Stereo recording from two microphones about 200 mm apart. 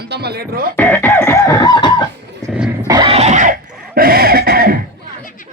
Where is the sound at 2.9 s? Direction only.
25° right (ahead or behind); by 4.8 s 45° right (ahead or behind).